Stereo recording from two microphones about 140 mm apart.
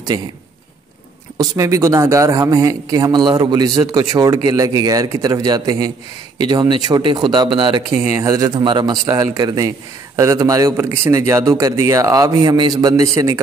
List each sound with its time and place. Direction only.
1.6 s speech: 20° right (ahead or behind)
7.9 s speech: 20° right (ahead or behind)